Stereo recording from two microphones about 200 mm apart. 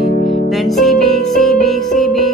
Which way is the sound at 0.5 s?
Centre (ahead or behind).